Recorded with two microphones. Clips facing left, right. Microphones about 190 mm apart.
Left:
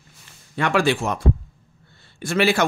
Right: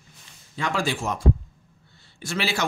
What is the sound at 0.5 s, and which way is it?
Speech, 65° left (ahead or behind).